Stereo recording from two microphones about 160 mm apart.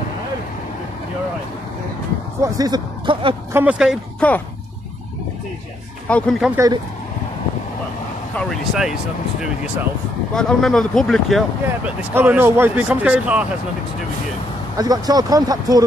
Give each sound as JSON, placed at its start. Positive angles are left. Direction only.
{"t": 2.4, "sound": "speech", "side_deg": -20}
{"t": 3.5, "sound": "speech", "side_deg": -5}
{"t": 4.2, "sound": "speech", "side_deg": 10}
{"t": 6.0, "sound": "speech", "side_deg": 5}
{"t": 6.5, "sound": "speech", "side_deg": -20}
{"t": 8.4, "sound": "speech", "side_deg": 0}
{"t": 10.3, "sound": "speech", "side_deg": 5}
{"t": 14.8, "sound": "speech", "side_deg": -25}